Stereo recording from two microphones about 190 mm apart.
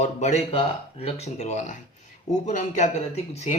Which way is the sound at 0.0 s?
35° left (ahead or behind).